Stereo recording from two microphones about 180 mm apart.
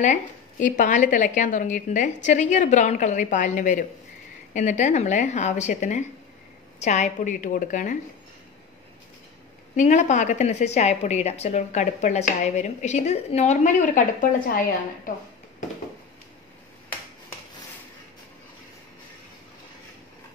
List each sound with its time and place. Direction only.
0.0 s a woman's voice: 45° left (ahead or behind)
9.8 s a woman's voice: 40° left (ahead or behind)